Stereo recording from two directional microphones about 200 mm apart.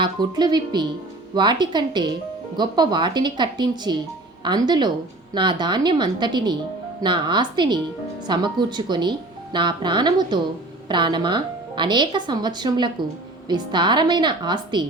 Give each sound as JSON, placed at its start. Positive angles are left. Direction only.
{"t": 0.0, "sound": "speech", "side_deg": -20}